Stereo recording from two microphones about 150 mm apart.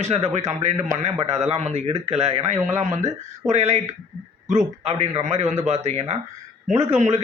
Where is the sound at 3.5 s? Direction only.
45° right (ahead or behind).